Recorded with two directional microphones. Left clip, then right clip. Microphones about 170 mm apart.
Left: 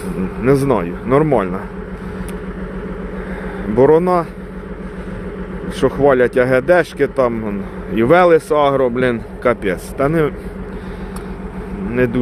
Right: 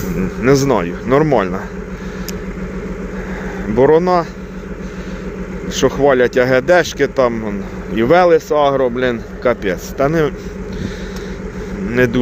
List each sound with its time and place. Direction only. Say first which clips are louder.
0.2 s speech: right 2 dB; 5° left (ahead or behind)
3.8 s speech: even; 15° left (ahead or behind)
5.6 s speech: right 1 dB; 15° left (ahead or behind)
7.9 s a man's voice: even; 20° left (ahead or behind)
11.9 s speech: right 2 dB; 5° left (ahead or behind)